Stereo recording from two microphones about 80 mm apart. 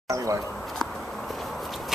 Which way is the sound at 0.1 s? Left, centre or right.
Right.